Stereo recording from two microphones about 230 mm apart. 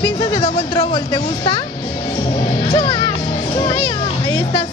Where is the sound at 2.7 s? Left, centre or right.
Left.